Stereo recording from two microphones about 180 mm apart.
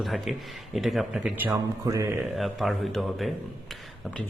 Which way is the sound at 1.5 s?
20° right (ahead or behind).